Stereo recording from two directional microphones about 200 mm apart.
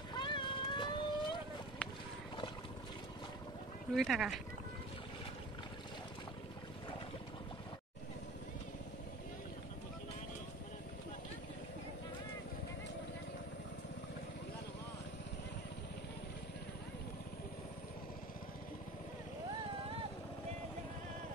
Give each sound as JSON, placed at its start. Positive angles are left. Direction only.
{"t": 0.1, "sound": "boat", "side_deg": 25}
{"t": 3.9, "sound": "speech", "side_deg": 0}